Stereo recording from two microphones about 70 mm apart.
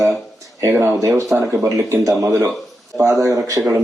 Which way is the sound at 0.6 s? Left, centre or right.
Right.